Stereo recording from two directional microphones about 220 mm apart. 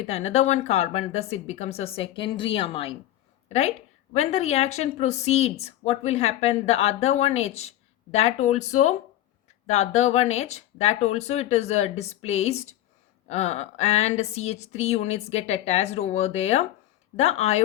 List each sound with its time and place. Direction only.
0.1 s a woman's voice: 30° left (ahead or behind)